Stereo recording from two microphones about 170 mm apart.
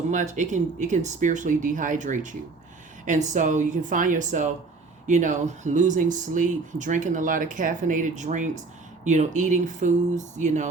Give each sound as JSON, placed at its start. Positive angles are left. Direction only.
{"t": 0.1, "sound": "speech", "side_deg": -45}